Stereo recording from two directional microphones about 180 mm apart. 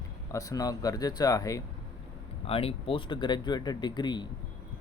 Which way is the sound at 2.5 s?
30° left (ahead or behind).